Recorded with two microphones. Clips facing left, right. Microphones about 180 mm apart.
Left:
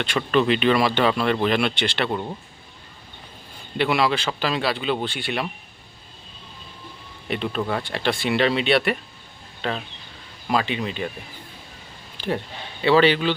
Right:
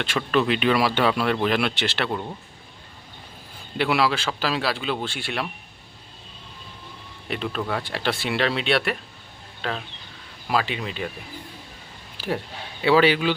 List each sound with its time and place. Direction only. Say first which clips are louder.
0.0 s speech: left 2 dB; centre (ahead or behind)
3.8 s speech: left 1 dB; centre (ahead or behind)
7.3 s speech: left 2 dB; centre (ahead or behind)
12.1 s a sound: left 1 dB; 5° right (ahead or behind)
12.8 s speech: left 1 dB; 10° right (ahead or behind)